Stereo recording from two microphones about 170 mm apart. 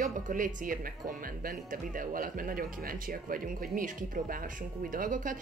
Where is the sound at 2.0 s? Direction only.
55° right (ahead or behind).